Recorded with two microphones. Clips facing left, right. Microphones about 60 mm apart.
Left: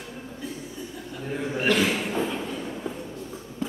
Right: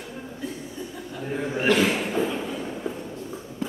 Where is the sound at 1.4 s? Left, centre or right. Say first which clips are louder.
Right 2 dB; centre.